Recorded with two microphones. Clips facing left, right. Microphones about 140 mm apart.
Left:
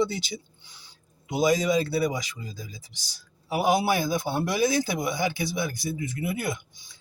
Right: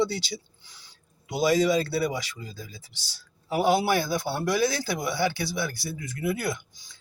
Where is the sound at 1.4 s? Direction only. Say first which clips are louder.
Right 1 dB; 20° left (ahead or behind).